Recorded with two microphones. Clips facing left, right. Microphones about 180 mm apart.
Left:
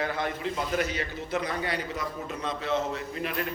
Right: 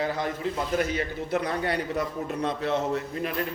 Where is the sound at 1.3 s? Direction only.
60° right (ahead or behind).